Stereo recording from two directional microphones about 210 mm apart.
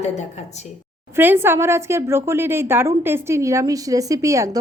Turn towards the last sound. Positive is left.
turn(degrees=-15)  # may be behind; listen again after turning